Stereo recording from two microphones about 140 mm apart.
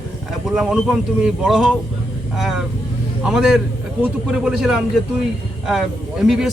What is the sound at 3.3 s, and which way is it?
Speech, 5° right (ahead or behind).